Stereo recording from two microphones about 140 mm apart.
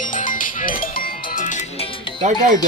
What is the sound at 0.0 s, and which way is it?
Music, 65° left (ahead or behind).